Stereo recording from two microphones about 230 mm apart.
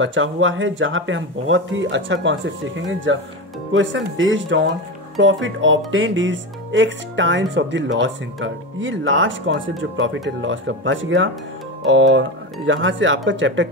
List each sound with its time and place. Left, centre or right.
0.0 s speech: right